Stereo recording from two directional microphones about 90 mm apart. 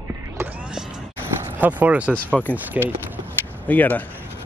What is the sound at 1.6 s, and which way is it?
Speech, 15° right (ahead or behind).